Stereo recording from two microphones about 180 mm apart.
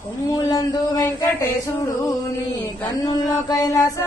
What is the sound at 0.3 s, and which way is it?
Speech, 20° left (ahead or behind).